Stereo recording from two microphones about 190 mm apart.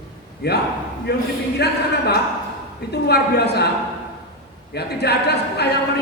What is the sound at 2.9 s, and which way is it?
Speech, 60° left (ahead or behind).